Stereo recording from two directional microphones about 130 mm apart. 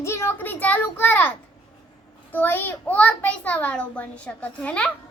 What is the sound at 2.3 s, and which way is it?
A child's voice, 15° left (ahead or behind).